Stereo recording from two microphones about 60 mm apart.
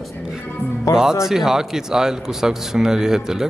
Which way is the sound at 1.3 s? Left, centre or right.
Centre.